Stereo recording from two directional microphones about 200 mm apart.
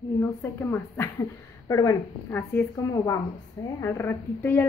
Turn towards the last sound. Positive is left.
turn(degrees=10)  # may be behind; listen again after turning